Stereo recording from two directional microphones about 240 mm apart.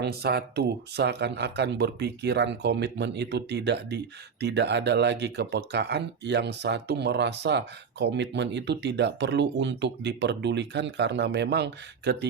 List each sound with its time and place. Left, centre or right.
0.0 s speech: right